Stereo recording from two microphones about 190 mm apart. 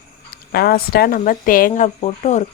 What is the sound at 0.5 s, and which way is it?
Speech, 55° left (ahead or behind).